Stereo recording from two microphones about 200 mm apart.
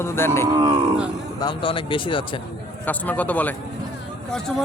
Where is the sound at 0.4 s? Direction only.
20° right (ahead or behind).